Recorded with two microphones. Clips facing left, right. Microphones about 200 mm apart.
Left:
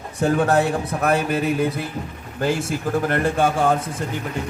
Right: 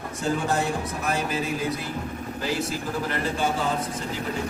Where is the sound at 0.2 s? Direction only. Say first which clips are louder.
Left 7 dB; 60° left (ahead or behind).